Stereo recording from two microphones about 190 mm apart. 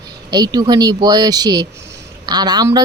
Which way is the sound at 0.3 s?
20° right (ahead or behind).